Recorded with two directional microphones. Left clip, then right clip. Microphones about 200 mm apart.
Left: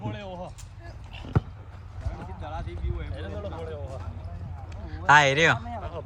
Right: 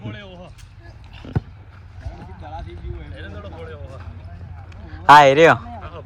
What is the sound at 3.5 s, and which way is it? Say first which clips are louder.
Speech: right 1 dB; 50° left (ahead or behind).